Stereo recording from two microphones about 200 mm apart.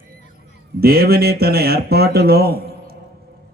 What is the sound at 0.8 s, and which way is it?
Speech, 50° right (ahead or behind).